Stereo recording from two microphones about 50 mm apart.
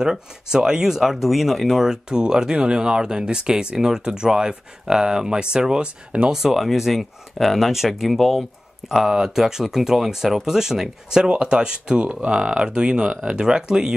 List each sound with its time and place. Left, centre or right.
0.0 s speech: centre
6.4 s speech: centre